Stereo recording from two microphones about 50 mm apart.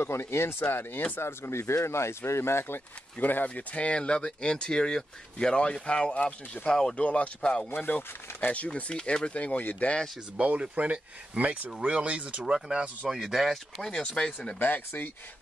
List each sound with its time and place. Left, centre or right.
0.0 s speech: left
1.2 s speech: left
3.2 s speech: left
3.4 s speech: left
6.7 s speech: centre
7.0 s speech: left
7.7 s speech: left
10.5 s speech: right
11.7 s speech: right
12.5 s speech: centre
14.6 s speech: left